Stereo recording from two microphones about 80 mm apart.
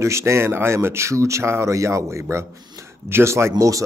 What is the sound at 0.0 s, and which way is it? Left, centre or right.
A man's voice, right.